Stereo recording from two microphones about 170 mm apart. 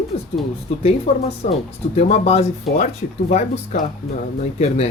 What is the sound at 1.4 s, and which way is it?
Speech, 35° left (ahead or behind).